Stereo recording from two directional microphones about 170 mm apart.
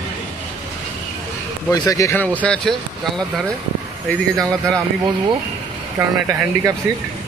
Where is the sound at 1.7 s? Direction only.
20° left (ahead or behind).